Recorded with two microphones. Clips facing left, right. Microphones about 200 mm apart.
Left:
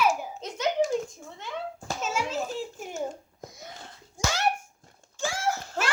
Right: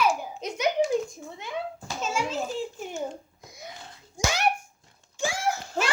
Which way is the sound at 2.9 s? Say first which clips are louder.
Even; 45° left (ahead or behind).